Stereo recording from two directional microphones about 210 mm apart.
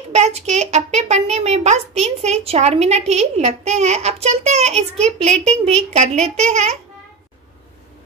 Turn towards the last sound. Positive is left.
turn(degrees=-30)  # may be behind; listen again after turning